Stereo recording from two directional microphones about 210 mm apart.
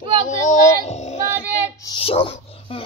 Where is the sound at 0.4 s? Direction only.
35° left (ahead or behind).